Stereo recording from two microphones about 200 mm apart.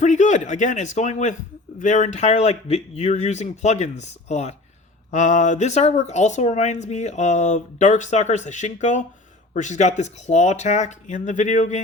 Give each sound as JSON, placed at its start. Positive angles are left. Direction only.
{"t": 0.0, "sound": "speech", "side_deg": 35}